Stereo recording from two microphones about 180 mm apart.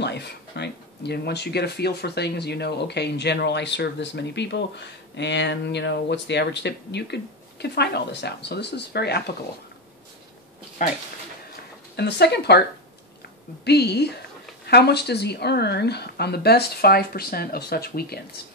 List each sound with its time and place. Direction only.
0.0 s speech: 70° left (ahead or behind)
12.0 s a woman's voice: 65° left (ahead or behind)